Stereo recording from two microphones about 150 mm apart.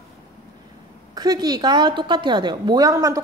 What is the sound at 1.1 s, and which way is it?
A woman's voice, 25° right (ahead or behind).